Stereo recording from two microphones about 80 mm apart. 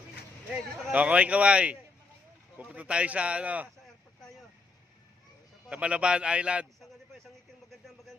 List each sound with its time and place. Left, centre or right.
0.5 s speech: centre
5.6 s speech: centre
7.7 s a sound: centre